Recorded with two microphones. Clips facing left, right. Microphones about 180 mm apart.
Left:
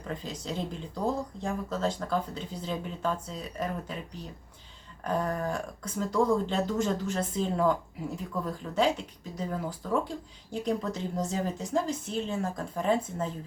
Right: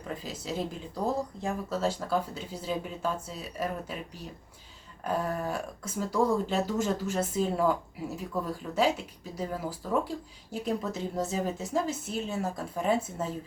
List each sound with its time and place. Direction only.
0.1 s speech: 5° right (ahead or behind)
5.0 s speech: 5° right (ahead or behind)